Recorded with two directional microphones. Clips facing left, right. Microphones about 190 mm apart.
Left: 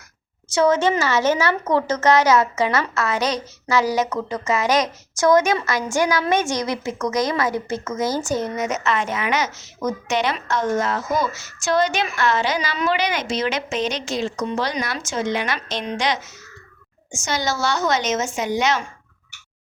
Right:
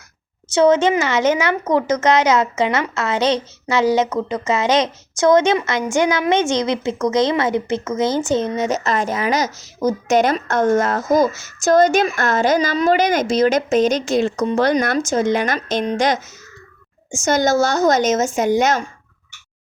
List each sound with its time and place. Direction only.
0.5 s a woman's voice: 20° right (ahead or behind); by 18.9 s 45° right (ahead or behind)